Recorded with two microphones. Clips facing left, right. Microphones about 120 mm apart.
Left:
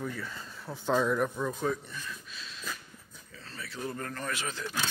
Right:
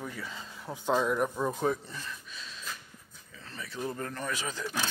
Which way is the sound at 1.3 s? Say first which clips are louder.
Right 2 dB; 25° right (ahead or behind).